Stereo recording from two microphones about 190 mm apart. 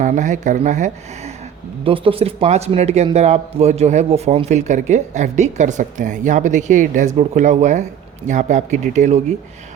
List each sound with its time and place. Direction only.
0.0 s speech: 40° right (ahead or behind)
1.8 s speech: 30° right (ahead or behind)